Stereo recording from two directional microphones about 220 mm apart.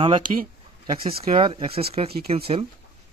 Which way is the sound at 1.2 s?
25° right (ahead or behind).